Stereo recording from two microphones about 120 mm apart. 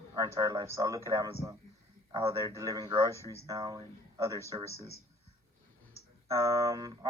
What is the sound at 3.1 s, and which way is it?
A man's voice, 25° right (ahead or behind).